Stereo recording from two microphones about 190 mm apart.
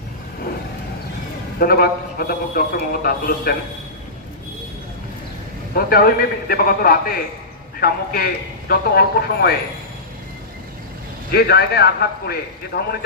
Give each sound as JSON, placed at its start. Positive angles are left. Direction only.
{"t": 1.5, "sound": "a man's voice", "side_deg": 55}
{"t": 5.7, "sound": "a man's voice", "side_deg": 50}
{"t": 11.3, "sound": "a man's voice", "side_deg": 55}